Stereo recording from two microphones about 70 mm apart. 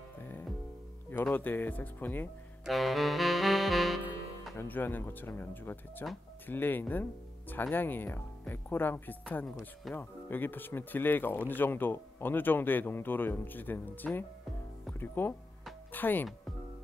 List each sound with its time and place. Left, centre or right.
1.3 s speech: left
2.6 s music: centre
4.6 s speech: left